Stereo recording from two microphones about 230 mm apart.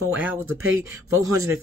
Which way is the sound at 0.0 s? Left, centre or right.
Centre.